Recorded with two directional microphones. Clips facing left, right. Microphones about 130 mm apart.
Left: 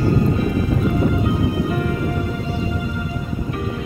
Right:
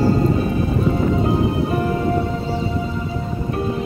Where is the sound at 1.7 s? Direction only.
30° right (ahead or behind).